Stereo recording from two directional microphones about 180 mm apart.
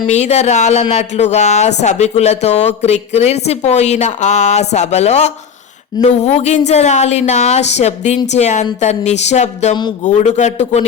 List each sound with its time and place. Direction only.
0.1 s speech: 40° left (ahead or behind)